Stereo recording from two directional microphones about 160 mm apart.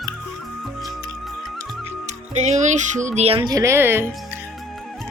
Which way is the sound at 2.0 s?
45° right (ahead or behind).